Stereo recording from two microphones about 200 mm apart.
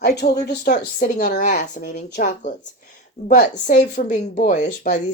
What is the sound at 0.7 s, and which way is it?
Speech, 40° left (ahead or behind).